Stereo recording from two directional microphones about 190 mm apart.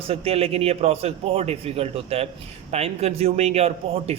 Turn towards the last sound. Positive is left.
turn(degrees=-35)  # may be behind; listen again after turning